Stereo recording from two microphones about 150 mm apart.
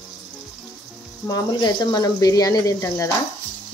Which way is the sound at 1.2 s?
25° left (ahead or behind).